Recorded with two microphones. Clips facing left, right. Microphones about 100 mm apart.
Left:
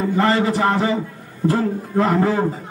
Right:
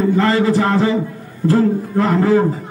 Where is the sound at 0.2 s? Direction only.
20° left (ahead or behind).